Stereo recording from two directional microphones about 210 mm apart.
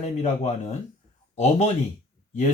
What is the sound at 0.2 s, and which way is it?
Speech, 30° left (ahead or behind).